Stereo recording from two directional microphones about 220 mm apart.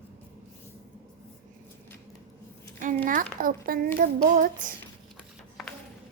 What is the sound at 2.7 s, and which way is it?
A child's voice, 35° right (ahead or behind).